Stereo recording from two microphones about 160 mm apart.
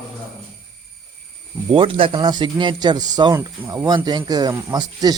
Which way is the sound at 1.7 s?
35° right (ahead or behind).